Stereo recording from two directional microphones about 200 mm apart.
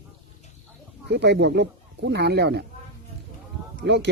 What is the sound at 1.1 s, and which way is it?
Speech, 55° right (ahead or behind).